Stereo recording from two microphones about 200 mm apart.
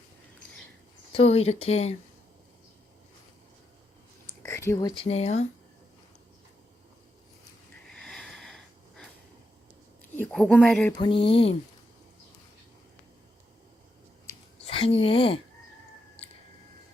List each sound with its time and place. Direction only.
1.1 s speech: 30° left (ahead or behind)
4.4 s a sound: 15° left (ahead or behind)
5.0 s speech: 30° left (ahead or behind)
7.9 s sniff: centre (ahead or behind)
10.2 s speech: 5° left (ahead or behind)
10.9 s a sound: 25° left (ahead or behind)
14.7 s speech: 25° left (ahead or behind)